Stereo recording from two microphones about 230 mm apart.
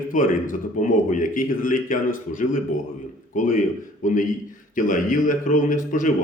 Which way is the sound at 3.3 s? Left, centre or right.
Left.